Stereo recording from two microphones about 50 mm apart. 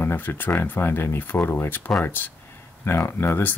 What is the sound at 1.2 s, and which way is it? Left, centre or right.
Speech, left.